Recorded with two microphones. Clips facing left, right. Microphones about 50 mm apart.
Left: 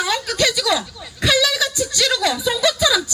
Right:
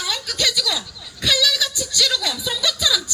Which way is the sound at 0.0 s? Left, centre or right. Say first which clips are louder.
Left 5 dB; centre.